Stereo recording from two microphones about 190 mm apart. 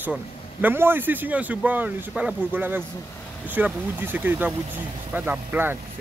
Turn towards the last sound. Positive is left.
turn(degrees=-10)  # may be behind; listen again after turning